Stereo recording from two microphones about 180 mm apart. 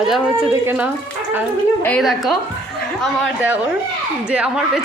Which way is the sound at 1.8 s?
5° left (ahead or behind).